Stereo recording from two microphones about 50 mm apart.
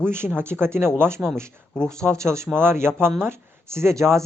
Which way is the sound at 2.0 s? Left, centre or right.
Right.